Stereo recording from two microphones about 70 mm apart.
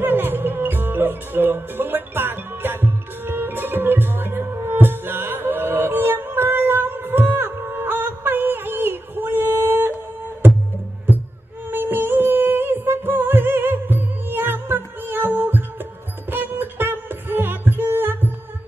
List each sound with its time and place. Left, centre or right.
0.0 s music: right
11.7 s music: right